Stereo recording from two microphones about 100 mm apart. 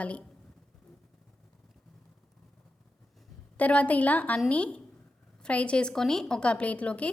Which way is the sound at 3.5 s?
15° left (ahead or behind).